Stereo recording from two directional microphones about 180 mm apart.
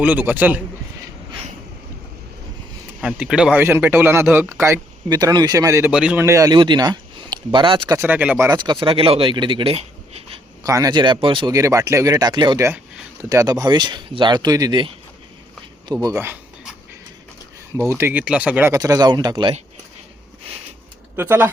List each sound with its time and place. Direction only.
0.0 s speech: 10° right (ahead or behind)
3.0 s speech: 5° right (ahead or behind)
5.9 s a man's voice: 5° right (ahead or behind)
6.2 s speech: 20° right (ahead or behind)
7.9 s speech: 10° right (ahead or behind)
8.4 s speech: 25° right (ahead or behind)
10.6 s speech: 20° right (ahead or behind)
15.9 s a sound: 20° right (ahead or behind)
17.9 s speech: 10° right (ahead or behind)
18.7 s speech: 20° right (ahead or behind)
21.2 s speech: 10° right (ahead or behind)